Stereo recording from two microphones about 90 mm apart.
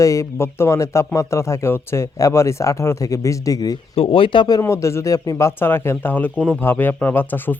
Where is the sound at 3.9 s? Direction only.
85° left.